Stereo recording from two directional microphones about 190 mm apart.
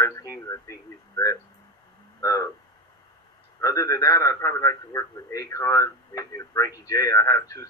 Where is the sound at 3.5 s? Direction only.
15° left (ahead or behind).